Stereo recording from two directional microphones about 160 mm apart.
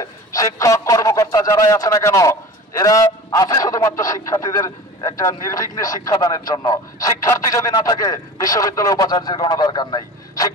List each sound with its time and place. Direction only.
0.0 s a man's voice: 20° left (ahead or behind)